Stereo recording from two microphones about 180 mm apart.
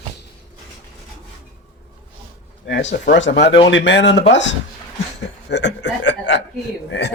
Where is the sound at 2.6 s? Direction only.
75° left (ahead or behind).